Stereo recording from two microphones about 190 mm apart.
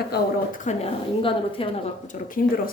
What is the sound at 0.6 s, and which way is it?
A woman's voice, 30° left (ahead or behind).